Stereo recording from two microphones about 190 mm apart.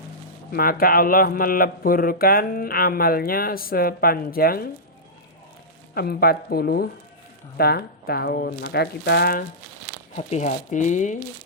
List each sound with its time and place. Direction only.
0.5 s speech: 50° left (ahead or behind)
5.9 s speech: 55° left (ahead or behind)
10.2 s speech: 40° left (ahead or behind)